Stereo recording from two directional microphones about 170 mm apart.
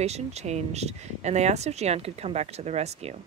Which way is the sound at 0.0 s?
40° right (ahead or behind).